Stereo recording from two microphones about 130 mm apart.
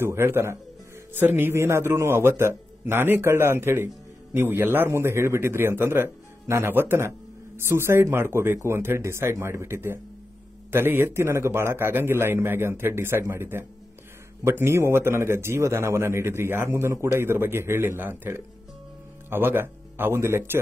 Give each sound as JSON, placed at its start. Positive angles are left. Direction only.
{"t": 0.0, "sound": "a man's voice", "side_deg": -20}